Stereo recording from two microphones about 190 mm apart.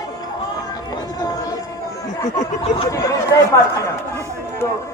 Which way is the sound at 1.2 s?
20° left (ahead or behind).